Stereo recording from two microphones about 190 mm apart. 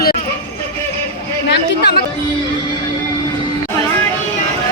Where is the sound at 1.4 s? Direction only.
60° left (ahead or behind).